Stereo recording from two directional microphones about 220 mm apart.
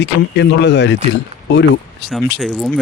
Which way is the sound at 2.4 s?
Centre (ahead or behind).